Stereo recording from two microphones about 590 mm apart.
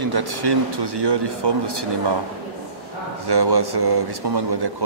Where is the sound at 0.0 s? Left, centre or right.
Right.